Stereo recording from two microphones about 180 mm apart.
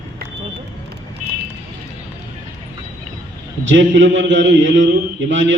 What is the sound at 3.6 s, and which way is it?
A man's voice, 90° right.